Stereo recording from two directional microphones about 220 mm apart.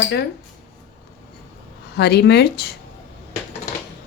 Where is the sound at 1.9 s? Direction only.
50° left (ahead or behind).